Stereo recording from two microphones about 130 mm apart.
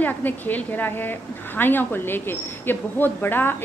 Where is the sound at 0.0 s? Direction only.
15° left (ahead or behind).